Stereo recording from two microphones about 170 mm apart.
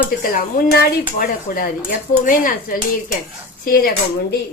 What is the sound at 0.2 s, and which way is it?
A woman's voice, 55° left (ahead or behind).